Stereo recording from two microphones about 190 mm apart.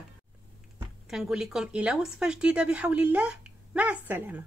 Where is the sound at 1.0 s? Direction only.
5° right (ahead or behind).